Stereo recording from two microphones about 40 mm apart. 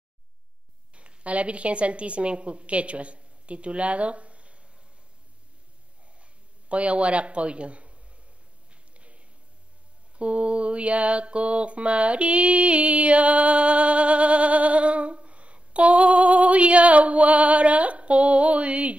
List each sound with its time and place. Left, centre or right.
0.9 s a woman's voice: right
6.7 s speech: right
8.9 s a sound: right
10.1 s mantra: right